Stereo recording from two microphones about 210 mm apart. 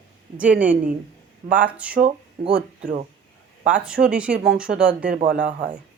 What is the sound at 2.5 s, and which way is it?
Speech, 50° right (ahead or behind).